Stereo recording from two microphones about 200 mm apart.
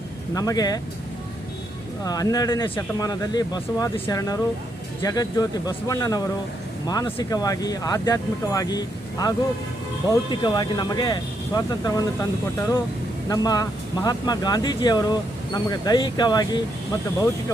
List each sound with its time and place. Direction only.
0.3 s speech: 20° left (ahead or behind)
2.0 s speech: 20° left (ahead or behind)